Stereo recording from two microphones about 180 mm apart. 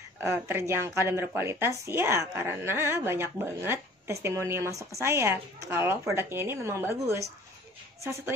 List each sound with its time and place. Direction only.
0.2 s a woman's voice: 15° right (ahead or behind)